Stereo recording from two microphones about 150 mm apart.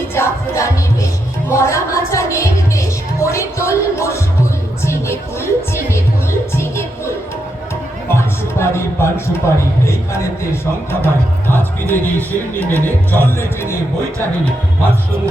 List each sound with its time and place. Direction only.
0.1 s music: 20° left (ahead or behind)
1.5 s a woman's voice: 20° left (ahead or behind)
6.6 s music: 20° left (ahead or behind)
8.1 s a man's voice: 15° left (ahead or behind)